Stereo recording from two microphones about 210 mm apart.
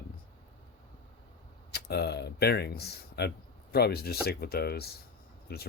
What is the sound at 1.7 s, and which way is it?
Speech, 50° left (ahead or behind).